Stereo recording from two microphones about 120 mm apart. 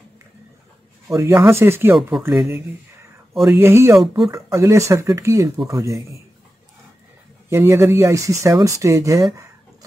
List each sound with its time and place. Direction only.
1.0 s speech: 25° right (ahead or behind)
7.4 s speech: 20° right (ahead or behind)